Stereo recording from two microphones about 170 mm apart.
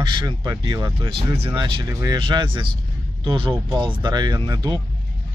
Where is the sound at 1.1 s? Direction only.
35° right (ahead or behind).